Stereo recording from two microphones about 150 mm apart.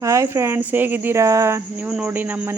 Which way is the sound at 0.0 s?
20° right (ahead or behind).